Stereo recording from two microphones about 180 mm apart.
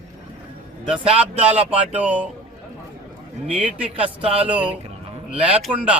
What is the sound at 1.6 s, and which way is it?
Speech, 10° right (ahead or behind).